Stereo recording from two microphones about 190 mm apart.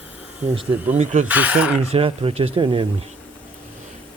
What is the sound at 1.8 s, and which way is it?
Speech, 30° right (ahead or behind).